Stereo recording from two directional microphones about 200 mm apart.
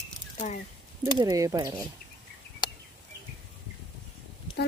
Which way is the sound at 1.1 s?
20° right (ahead or behind).